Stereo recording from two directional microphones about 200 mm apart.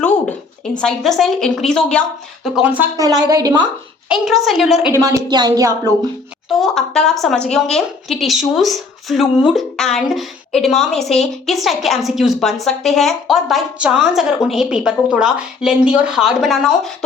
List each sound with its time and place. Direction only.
0.8 s a woman's voice: 5° left (ahead or behind); by 3.7 s 20° right (ahead or behind)
4.1 s a woman's voice: centre (ahead or behind)
4.9 s speech: 15° right (ahead or behind)
6.5 s a woman's voice: centre (ahead or behind)